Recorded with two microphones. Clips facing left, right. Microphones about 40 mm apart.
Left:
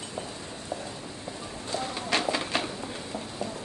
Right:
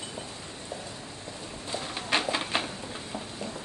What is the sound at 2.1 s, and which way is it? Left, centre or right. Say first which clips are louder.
Bird: even; right.